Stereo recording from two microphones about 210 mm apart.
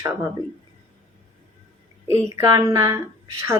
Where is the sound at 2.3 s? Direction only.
15° right (ahead or behind).